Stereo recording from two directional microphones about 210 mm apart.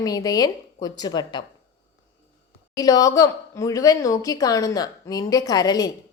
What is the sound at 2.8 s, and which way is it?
A woman's voice, 15° left (ahead or behind).